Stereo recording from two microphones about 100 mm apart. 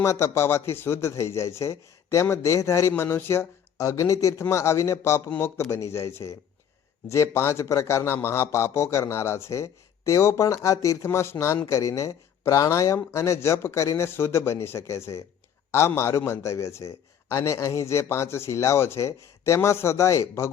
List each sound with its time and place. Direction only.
0.0 s a man's voice: 30° left (ahead or behind)